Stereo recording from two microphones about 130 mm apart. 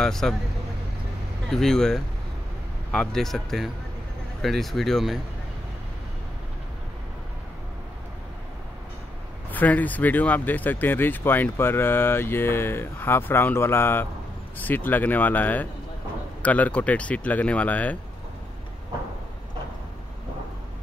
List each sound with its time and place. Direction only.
0.0 s speech: 5° left (ahead or behind)
1.5 s speech: 5° left (ahead or behind)
9.5 s speech: 15° left (ahead or behind)